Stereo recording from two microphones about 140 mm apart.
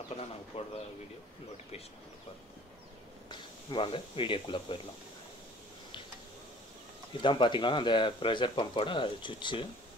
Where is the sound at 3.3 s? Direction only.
35° left (ahead or behind).